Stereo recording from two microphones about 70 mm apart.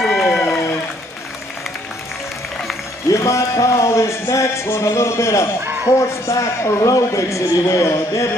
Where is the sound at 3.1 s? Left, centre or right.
Left.